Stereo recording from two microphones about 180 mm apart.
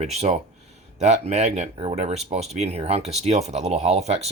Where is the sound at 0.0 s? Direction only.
35° right (ahead or behind).